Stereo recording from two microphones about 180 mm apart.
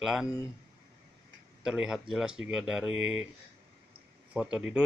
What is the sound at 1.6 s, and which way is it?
Speech, 5° right (ahead or behind).